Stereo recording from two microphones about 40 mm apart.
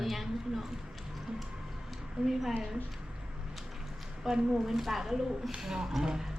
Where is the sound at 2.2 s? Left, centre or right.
Right.